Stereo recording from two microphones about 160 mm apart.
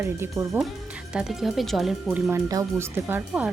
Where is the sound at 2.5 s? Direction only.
20° right (ahead or behind).